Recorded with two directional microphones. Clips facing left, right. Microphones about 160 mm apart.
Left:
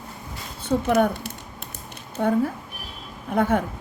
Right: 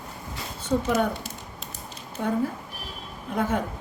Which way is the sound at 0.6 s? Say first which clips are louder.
Left 4 dB; 60° left (ahead or behind).